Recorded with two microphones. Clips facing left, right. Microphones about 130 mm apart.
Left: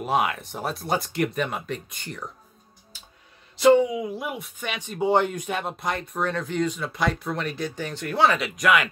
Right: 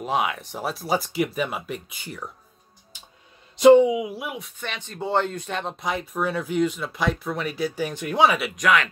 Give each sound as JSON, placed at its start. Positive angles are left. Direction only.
{"t": 0.0, "sound": "speech", "side_deg": 0}
{"t": 3.5, "sound": "speech", "side_deg": -20}
{"t": 4.0, "sound": "speech", "side_deg": -5}
{"t": 4.6, "sound": "speech", "side_deg": 10}
{"t": 8.5, "sound": "speech", "side_deg": 0}